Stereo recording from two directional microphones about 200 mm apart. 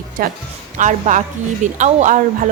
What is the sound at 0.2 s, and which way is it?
A woman's voice, 45° right (ahead or behind).